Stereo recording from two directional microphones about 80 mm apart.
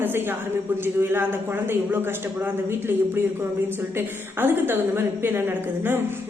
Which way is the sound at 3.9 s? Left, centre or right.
Right.